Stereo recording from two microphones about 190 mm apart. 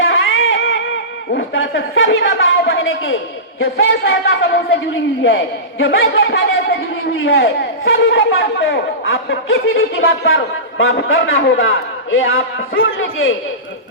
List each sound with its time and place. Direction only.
0.0 s a sound: 85° left
1.3 s a man's voice: 60° left (ahead or behind); by 4.8 s 85° left
6.1 s speech: 55° left (ahead or behind)
7.3 s a man's voice: 85° left